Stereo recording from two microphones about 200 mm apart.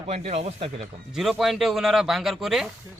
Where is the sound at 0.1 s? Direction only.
30° right (ahead or behind).